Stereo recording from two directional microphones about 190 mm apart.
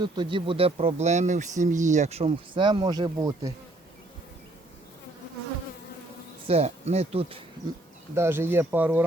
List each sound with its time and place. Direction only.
0.0 s speech: 25° right (ahead or behind)
6.5 s speech: 35° right (ahead or behind)
8.1 s speech: 10° right (ahead or behind)